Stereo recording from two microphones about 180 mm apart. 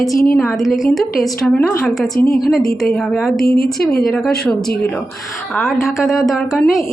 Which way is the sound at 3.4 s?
55° left (ahead or behind).